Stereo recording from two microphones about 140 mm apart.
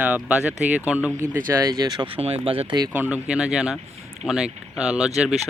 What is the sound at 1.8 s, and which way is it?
Speech, 30° right (ahead or behind).